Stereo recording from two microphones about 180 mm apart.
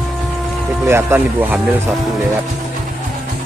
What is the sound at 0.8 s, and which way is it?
Speech, 10° right (ahead or behind).